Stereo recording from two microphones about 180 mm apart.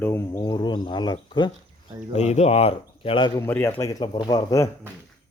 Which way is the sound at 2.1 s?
40° left (ahead or behind).